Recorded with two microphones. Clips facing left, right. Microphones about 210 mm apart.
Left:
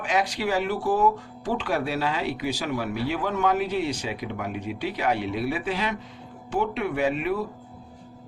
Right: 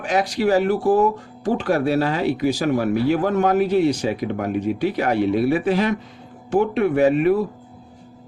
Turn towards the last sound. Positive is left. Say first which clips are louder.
# right 9 dB
turn(degrees=-45)  # may be behind; listen again after turning